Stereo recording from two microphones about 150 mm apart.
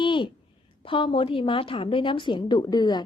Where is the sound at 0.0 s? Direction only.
30° left (ahead or behind).